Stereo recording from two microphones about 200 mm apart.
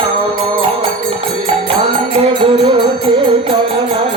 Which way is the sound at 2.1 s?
30° right (ahead or behind).